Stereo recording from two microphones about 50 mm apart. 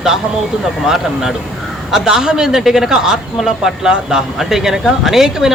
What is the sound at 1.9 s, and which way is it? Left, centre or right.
Speech, centre.